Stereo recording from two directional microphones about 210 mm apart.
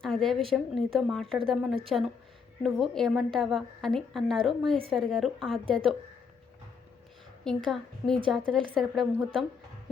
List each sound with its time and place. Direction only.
0.0 s a sound: centre (ahead or behind)
0.5 s a woman's voice: centre (ahead or behind)
7.4 s a woman's voice: centre (ahead or behind)